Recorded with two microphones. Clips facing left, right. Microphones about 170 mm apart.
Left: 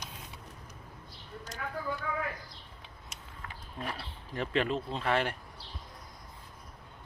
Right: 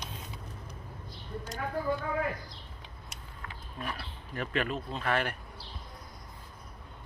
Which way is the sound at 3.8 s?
25° left (ahead or behind).